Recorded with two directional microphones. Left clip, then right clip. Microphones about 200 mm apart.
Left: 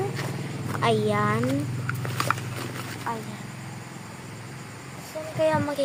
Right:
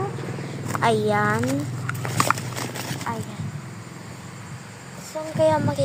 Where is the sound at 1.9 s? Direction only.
40° right (ahead or behind).